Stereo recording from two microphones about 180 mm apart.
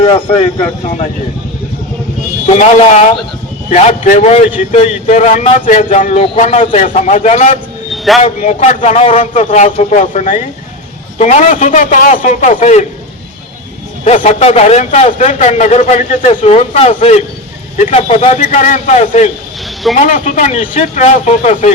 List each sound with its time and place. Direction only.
2.5 s a man's voice: 40° left (ahead or behind)
14.0 s a man's voice: 40° left (ahead or behind)